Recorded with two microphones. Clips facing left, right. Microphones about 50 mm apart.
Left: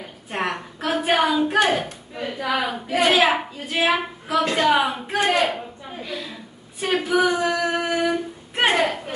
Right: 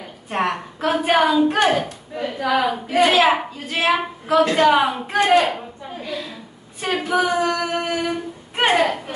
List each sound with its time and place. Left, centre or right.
0.3 s hands: centre
4.6 s female singing: centre
5.1 s a woman's voice: centre
6.8 s female singing: centre
8.5 s speech: centre